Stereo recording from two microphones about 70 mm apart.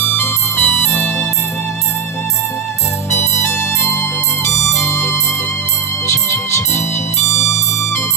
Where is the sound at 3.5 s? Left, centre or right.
Left.